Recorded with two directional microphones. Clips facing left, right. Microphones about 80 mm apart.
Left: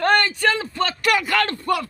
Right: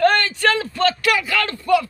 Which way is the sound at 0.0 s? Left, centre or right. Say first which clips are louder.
Right 2 dB; left.